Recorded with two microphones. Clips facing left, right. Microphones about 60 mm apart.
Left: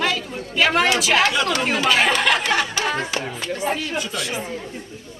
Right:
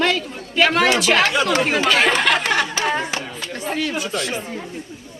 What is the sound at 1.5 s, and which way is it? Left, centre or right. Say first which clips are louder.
Speech: right 2 dB; right.